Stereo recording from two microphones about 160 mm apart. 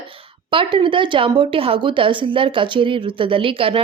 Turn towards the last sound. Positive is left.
turn(degrees=-35)  # may be behind; listen again after turning